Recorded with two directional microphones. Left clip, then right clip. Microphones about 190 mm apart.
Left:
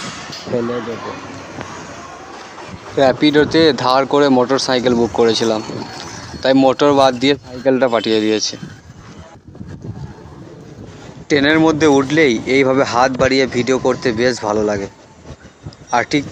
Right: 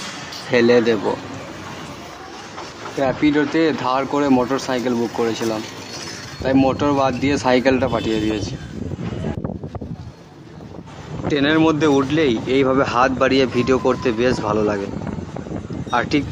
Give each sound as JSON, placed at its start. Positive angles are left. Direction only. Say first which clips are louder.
{"t": 3.0, "sound": "speech", "louder": "left 6 dB", "side_deg": 40}
{"t": 11.2, "sound": "speech", "louder": "left 4 dB", "side_deg": 35}
{"t": 15.9, "sound": "speech", "louder": "left 3 dB", "side_deg": 25}